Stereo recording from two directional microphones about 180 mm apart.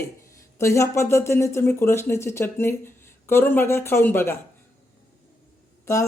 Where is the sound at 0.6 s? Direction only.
15° left (ahead or behind).